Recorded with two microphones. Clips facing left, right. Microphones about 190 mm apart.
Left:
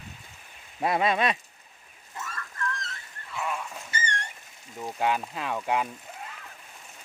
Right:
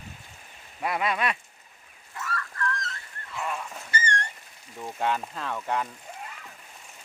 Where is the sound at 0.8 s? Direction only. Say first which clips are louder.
Left 3 dB; 25° left (ahead or behind).